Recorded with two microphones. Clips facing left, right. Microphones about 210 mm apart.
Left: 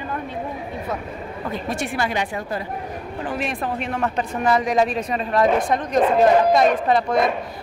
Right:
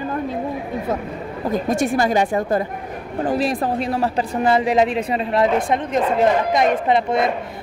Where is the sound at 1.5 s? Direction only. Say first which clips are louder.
Right 8 dB; 45° right (ahead or behind).